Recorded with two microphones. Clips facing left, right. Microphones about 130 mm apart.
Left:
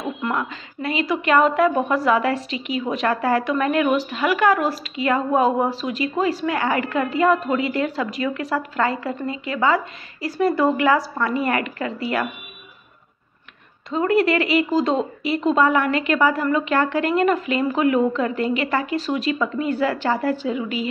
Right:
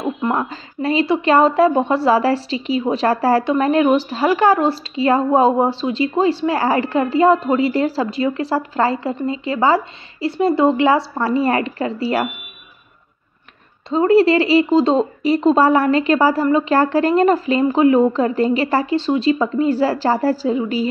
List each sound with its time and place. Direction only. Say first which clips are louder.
0.4 s a woman's voice: right 5 dB; 35° right (ahead or behind)
13.8 s a woman's voice: right 6 dB; 30° right (ahead or behind)